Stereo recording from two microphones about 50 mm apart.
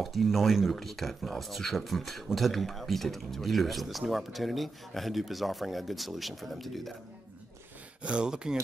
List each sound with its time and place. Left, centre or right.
0.0 s speech: centre
8.0 s speech: right